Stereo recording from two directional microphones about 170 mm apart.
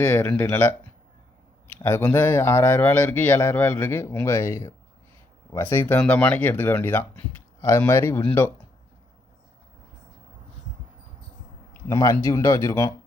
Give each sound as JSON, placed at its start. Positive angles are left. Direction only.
{"t": 0.0, "sound": "speech", "side_deg": 10}
{"t": 1.8, "sound": "speech", "side_deg": 15}
{"t": 11.9, "sound": "speech", "side_deg": 20}